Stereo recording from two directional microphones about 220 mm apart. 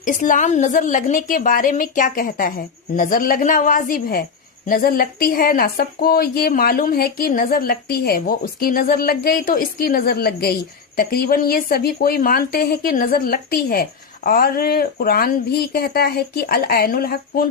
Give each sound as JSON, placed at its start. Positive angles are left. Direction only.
{"t": 0.0, "sound": "a woman's voice", "side_deg": 35}